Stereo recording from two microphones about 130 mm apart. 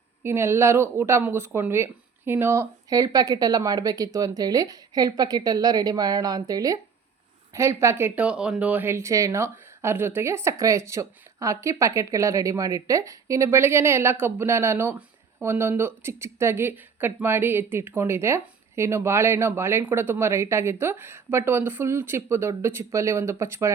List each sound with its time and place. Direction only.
0.2 s speech: 20° right (ahead or behind)